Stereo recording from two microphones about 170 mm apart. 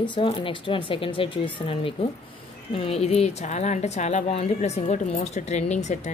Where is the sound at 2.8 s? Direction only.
40° left (ahead or behind).